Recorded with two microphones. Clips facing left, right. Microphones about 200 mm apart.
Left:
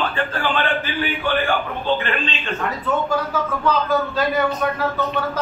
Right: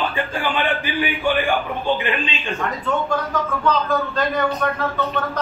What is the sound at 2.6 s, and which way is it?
A man's voice, 5° left (ahead or behind).